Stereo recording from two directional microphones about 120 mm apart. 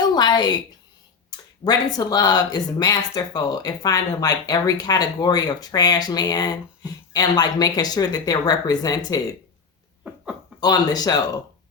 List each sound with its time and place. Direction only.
0.0 s a sound: 35° left (ahead or behind)
1.3 s speech: 35° left (ahead or behind)
10.6 s speech: 35° left (ahead or behind)